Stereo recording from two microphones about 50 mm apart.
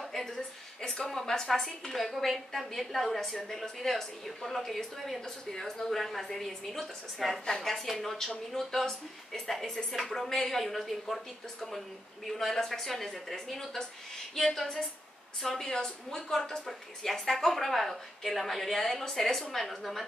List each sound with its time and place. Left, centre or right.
0.2 s a woman's voice: centre
12.3 s speech: centre
14.3 s a sound: centre
15.4 s speech: centre